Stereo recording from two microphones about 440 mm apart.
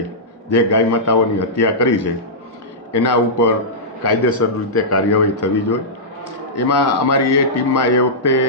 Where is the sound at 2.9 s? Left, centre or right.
Left.